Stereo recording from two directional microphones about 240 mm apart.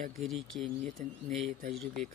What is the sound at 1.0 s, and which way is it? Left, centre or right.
Speech, right.